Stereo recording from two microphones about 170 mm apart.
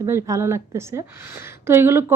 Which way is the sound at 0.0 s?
15° right (ahead or behind).